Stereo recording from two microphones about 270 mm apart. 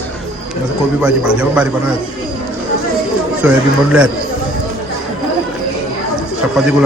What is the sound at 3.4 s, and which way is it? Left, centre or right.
Speech, centre.